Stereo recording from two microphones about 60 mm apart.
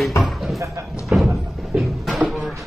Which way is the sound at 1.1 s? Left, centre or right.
Right.